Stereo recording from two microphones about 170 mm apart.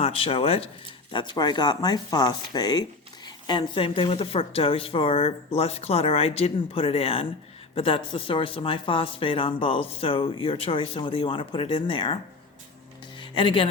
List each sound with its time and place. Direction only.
0.0 s speech: 35° left (ahead or behind)
13.1 s music: 30° left (ahead or behind)